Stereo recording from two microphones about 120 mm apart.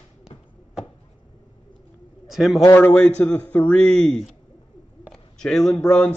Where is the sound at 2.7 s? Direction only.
15° left (ahead or behind).